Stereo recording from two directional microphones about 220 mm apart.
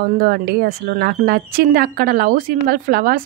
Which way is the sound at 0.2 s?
45° right (ahead or behind).